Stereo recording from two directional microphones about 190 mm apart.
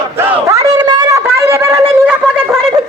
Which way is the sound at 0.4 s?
15° right (ahead or behind).